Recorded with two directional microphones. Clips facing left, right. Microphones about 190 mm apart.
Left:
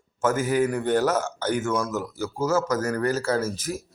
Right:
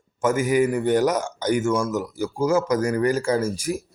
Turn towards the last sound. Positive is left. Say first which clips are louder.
# right 3 dB
turn(degrees=-10)  # may be behind; listen again after turning